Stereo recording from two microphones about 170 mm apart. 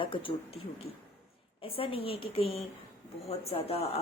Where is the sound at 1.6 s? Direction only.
35° left (ahead or behind).